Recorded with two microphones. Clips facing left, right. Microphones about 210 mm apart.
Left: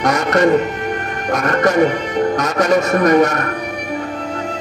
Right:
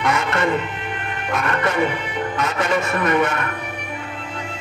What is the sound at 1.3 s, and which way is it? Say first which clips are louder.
Speech: left 7 dB; 40° left (ahead or behind).